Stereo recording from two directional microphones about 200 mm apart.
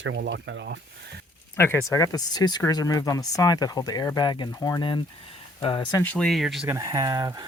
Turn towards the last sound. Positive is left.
turn(degrees=-20)  # may be behind; listen again after turning